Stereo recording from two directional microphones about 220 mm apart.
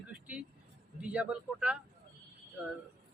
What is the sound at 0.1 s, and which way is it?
Vehicle, 5° right (ahead or behind).